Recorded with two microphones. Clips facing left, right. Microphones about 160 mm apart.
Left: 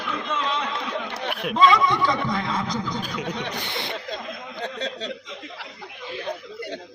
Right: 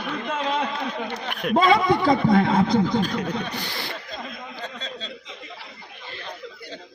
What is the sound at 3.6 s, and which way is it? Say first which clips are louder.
Speech: left 2 dB; 25° left (ahead or behind).